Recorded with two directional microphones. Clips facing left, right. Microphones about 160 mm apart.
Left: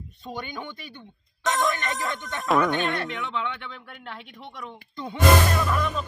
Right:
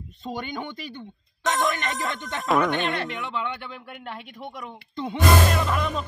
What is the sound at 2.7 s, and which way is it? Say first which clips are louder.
Speech: even; 20° right (ahead or behind).